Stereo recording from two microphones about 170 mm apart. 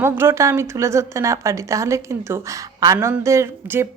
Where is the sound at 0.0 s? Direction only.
15° right (ahead or behind).